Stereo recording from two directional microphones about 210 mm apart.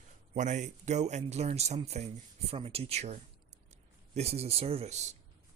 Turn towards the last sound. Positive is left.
turn(degrees=-30)  # may be behind; listen again after turning